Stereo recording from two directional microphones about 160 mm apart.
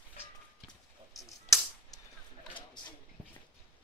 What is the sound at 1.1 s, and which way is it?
Tick-tock, centre (ahead or behind).